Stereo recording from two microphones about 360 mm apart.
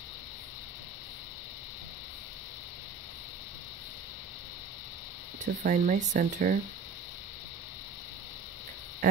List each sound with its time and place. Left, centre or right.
5.4 s speech: right